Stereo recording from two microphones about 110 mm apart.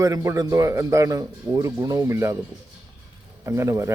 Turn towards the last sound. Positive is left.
turn(degrees=-25)  # may be behind; listen again after turning